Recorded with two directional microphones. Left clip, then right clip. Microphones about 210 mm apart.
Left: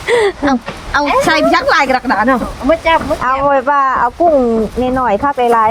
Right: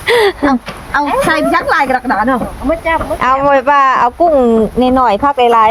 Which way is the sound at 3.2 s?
25° right (ahead or behind).